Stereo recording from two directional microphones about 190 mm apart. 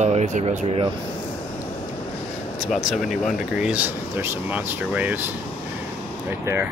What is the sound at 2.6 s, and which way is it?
Speech, centre (ahead or behind).